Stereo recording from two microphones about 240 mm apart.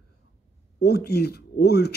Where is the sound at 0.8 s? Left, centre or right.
Left.